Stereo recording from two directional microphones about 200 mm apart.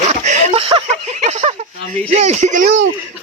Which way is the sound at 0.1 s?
35° right (ahead or behind).